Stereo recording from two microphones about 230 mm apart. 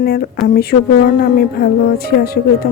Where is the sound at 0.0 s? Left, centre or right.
Left.